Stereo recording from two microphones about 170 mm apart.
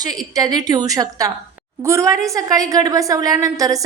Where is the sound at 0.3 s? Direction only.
25° right (ahead or behind).